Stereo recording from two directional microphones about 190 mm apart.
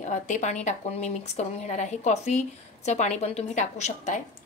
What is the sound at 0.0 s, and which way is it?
Speech, 40° left (ahead or behind).